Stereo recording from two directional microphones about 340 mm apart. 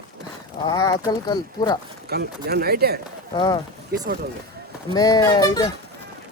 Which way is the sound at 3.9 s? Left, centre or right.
Right.